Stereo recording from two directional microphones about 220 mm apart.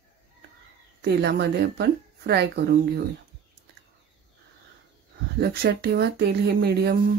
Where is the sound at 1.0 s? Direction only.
45° right (ahead or behind).